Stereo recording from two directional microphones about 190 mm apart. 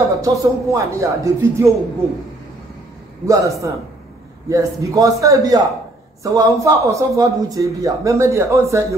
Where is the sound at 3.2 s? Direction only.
15° right (ahead or behind).